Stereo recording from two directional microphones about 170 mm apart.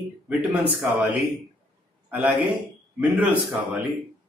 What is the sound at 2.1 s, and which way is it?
Speech, 10° right (ahead or behind).